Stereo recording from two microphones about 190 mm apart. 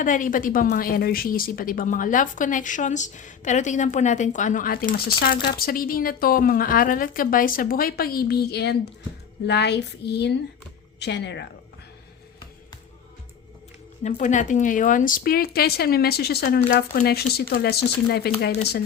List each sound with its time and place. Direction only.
0.0 s a woman's voice: 45° left (ahead or behind); by 11.4 s 65° left (ahead or behind)
14.0 s a woman's voice: 40° left (ahead or behind); by 18.3 s 55° left (ahead or behind)